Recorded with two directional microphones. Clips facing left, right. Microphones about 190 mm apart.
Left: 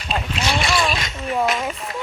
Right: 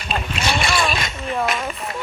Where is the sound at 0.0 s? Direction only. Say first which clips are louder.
Even; 55° right (ahead or behind).